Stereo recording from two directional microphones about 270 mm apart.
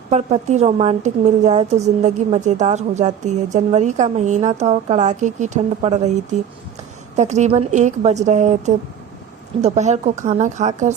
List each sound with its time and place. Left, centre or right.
0.1 s a woman's voice: right